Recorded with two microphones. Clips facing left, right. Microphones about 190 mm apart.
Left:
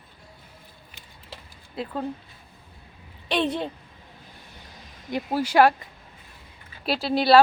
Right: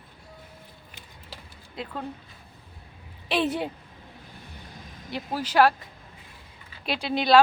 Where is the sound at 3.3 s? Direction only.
5° right (ahead or behind).